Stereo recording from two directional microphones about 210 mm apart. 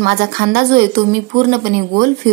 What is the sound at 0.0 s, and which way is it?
Speech, 45° right (ahead or behind).